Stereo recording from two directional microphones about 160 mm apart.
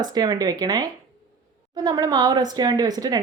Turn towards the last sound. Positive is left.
turn(degrees=-25)  # may be behind; listen again after turning